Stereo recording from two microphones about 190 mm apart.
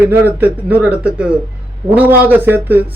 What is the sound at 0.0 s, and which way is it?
Speech, 10° right (ahead or behind).